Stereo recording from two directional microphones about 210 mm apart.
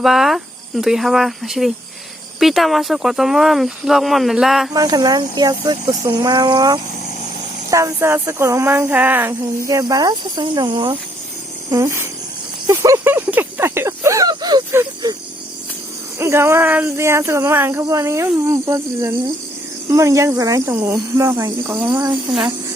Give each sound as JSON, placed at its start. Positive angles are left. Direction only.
{"t": 0.0, "sound": "speech", "side_deg": 0}
{"t": 4.7, "sound": "speech", "side_deg": -15}
{"t": 16.1, "sound": "speech", "side_deg": -10}